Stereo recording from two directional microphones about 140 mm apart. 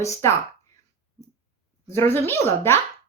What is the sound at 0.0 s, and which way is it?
Speech, 20° left (ahead or behind).